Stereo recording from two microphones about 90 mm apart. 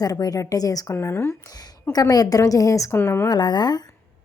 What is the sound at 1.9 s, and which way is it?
A woman's voice, 45° left (ahead or behind).